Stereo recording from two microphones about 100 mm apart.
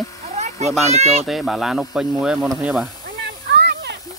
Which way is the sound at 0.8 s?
90° right.